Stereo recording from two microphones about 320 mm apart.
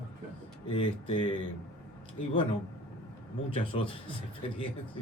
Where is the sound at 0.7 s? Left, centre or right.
Centre.